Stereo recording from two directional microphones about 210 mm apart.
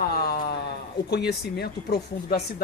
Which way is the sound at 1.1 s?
50° left (ahead or behind).